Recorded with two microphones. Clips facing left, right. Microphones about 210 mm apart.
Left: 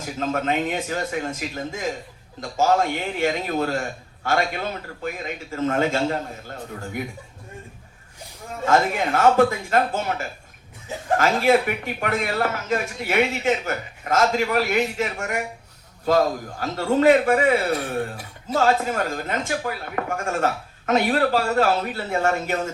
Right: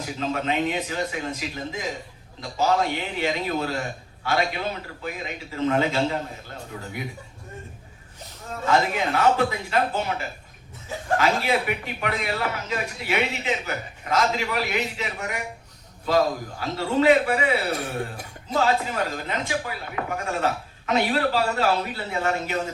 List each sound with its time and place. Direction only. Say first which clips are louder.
0.0 s a man's voice: left 2 dB; 45° left (ahead or behind)
8.6 s speech: left 2 dB; 45° left (ahead or behind)